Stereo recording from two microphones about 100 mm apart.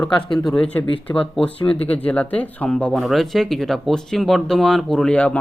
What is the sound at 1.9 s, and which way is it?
Speech, 15° left (ahead or behind).